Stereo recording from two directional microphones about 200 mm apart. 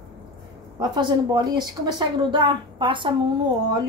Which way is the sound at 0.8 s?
20° right (ahead or behind).